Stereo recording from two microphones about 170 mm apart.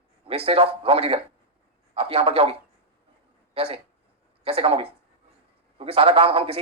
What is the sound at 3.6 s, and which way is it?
A man's voice, 35° right (ahead or behind).